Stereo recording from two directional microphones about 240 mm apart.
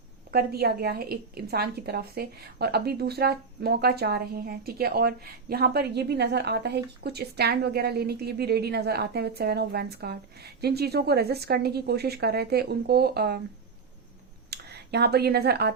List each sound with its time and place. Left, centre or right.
0.3 s a woman's voice: right
14.5 s speech: right